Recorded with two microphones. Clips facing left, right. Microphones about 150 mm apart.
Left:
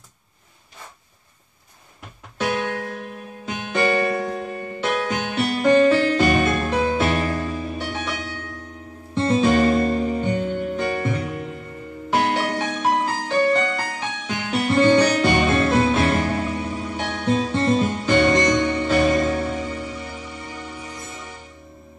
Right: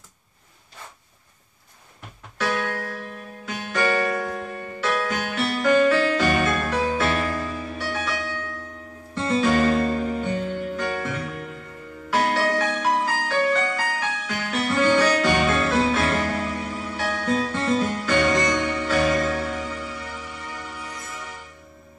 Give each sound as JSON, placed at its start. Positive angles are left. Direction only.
{"t": 2.3, "sound": "music", "side_deg": 20}